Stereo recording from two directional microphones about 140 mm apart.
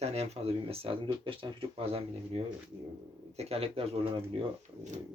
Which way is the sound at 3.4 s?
45° right (ahead or behind).